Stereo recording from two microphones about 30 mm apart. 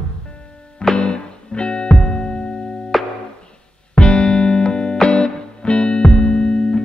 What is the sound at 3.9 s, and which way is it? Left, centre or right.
Music, left.